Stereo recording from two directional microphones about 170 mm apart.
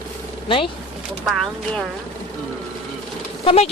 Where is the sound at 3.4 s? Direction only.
35° left (ahead or behind).